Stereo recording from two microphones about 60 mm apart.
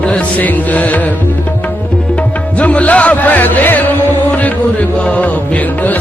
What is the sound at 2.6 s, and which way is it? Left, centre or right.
Music, left.